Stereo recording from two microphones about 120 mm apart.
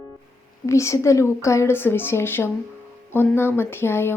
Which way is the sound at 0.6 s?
25° left (ahead or behind).